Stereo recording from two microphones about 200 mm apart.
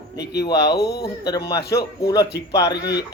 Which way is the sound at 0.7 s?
55° left (ahead or behind).